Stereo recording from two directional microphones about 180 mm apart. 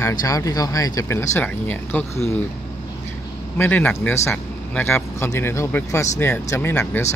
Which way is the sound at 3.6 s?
10° left (ahead or behind).